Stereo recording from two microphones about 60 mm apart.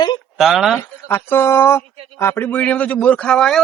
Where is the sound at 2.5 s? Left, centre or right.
Left.